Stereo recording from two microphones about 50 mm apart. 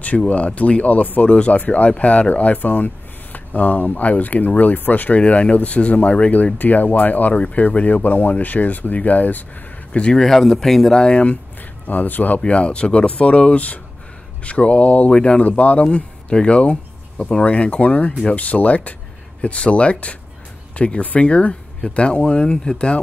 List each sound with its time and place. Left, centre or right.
0.0 s speech: left
10.1 s speech: centre
11.0 s speech: left
11.9 s speech: left